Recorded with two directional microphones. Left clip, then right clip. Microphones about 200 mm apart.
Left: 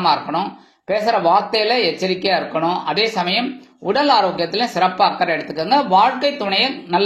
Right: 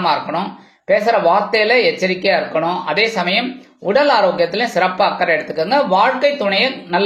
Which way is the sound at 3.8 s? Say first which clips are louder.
Right 2 dB; 25° left (ahead or behind).